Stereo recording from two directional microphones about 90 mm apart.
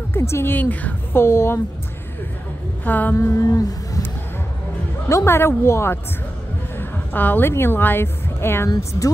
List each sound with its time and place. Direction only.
0.1 s a woman's voice: 30° left (ahead or behind)
2.8 s a woman's voice: 20° left (ahead or behind)
3.2 s humming: 35° left (ahead or behind)
5.0 s a woman's voice: 30° left (ahead or behind)